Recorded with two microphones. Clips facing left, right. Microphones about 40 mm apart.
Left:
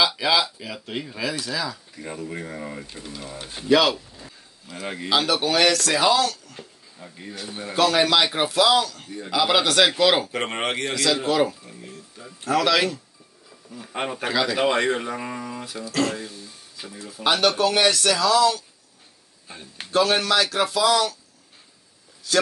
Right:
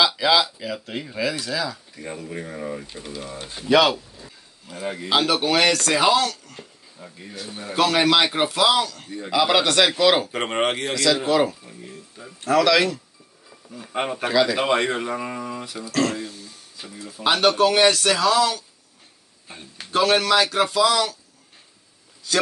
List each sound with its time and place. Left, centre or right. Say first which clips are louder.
0.0 s speech: right 2 dB; centre
3.0 s speech: right 2 dB; centre
3.6 s speech: right 1 dB; centre
4.8 s speech: right 2 dB; left
5.1 s speech: right 1 dB; centre
12.6 s speech: right 1 dB; centre
13.7 s speech: right 2 dB; centre
17.3 s speech: right 2 dB; centre
20.0 s speech: right 2 dB; centre